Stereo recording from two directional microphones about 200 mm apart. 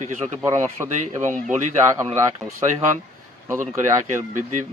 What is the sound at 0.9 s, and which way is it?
Speech, 35° right (ahead or behind).